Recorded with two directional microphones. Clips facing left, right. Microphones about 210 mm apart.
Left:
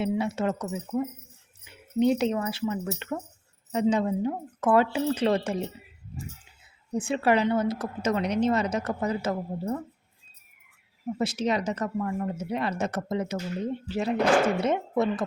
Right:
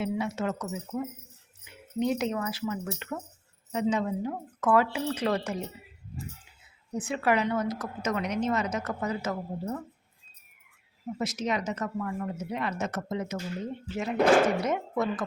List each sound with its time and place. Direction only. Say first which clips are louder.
0.0 s a woman's voice: left 3 dB; 30° left (ahead or behind)
6.9 s a woman's voice: left 3 dB; 30° left (ahead or behind)
11.2 s a woman's voice: left 4 dB; 30° left (ahead or behind)